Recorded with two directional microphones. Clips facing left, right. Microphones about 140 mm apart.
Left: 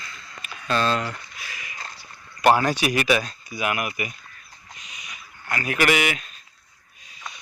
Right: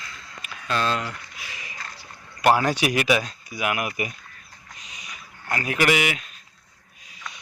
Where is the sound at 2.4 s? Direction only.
10° right (ahead or behind).